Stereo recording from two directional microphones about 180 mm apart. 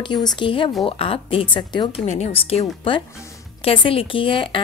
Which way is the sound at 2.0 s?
40° left (ahead or behind).